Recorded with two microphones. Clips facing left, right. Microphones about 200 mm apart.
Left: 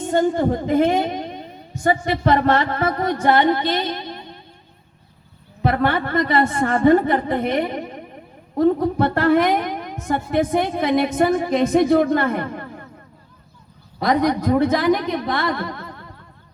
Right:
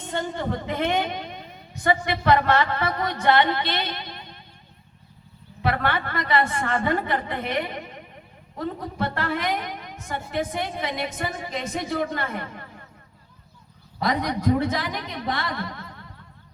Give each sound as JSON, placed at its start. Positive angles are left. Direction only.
{"t": 0.0, "sound": "a woman's voice", "side_deg": 45}
{"t": 5.6, "sound": "a woman's voice", "side_deg": 45}
{"t": 14.0, "sound": "a woman's voice", "side_deg": 50}